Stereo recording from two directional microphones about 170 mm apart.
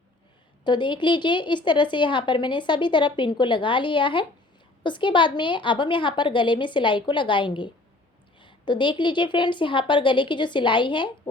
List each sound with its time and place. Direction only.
0.6 s a woman's voice: 25° left (ahead or behind)